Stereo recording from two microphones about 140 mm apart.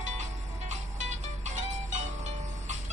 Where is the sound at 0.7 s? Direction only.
60° right (ahead or behind).